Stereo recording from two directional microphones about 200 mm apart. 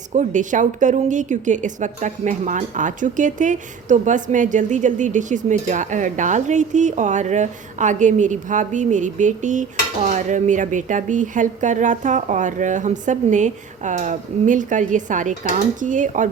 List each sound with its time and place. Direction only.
0.1 s a woman's voice: 40° right (ahead or behind)